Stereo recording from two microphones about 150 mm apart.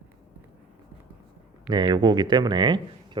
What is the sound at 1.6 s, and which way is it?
Speech, 30° right (ahead or behind).